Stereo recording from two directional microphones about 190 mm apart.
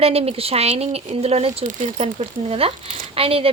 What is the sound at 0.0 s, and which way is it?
Speech, 30° right (ahead or behind).